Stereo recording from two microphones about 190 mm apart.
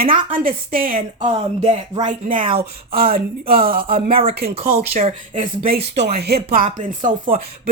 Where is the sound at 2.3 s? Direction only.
25° right (ahead or behind).